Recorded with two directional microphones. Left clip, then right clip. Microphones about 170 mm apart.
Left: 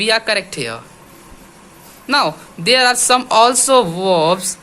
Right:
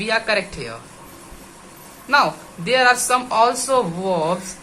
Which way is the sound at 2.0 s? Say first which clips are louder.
Left 1 dB; 50° left (ahead or behind).